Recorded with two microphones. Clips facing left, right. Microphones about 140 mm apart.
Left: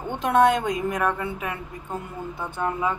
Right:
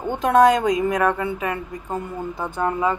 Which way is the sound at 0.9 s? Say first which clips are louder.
Right 5 dB; 90° right.